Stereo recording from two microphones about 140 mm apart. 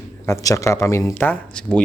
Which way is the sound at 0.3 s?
20° left (ahead or behind).